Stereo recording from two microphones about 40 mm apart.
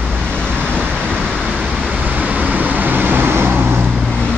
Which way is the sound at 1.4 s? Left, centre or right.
Right.